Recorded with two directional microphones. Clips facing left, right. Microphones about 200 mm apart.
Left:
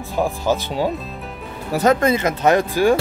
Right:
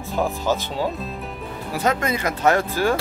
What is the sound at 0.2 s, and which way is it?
Speech, 15° left (ahead or behind).